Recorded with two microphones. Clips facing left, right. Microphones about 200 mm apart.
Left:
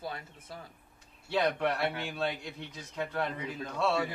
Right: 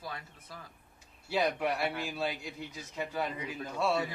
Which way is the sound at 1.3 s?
10° right (ahead or behind).